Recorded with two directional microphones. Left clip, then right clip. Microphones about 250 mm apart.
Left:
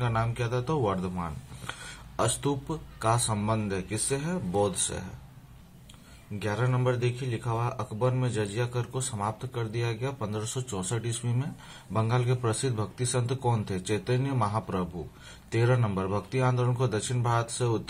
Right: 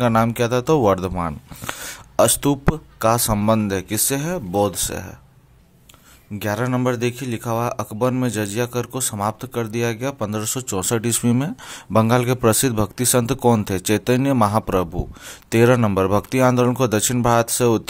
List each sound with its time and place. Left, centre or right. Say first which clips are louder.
0.0 s speech: right 13 dB; right
6.4 s speech: right 8 dB; right